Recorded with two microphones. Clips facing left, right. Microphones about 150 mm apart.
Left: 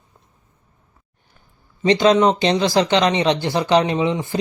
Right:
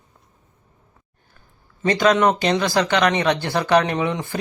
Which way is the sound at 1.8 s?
20° left (ahead or behind).